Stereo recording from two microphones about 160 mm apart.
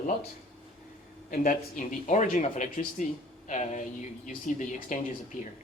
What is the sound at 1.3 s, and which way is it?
Speech, 55° left (ahead or behind).